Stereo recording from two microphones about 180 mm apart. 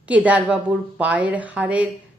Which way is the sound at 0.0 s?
10° right (ahead or behind).